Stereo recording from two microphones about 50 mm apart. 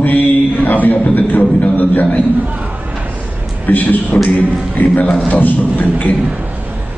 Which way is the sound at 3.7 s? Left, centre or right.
Left.